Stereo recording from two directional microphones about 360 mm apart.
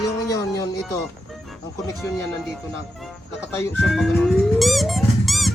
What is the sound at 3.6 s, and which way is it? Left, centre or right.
Speech, centre.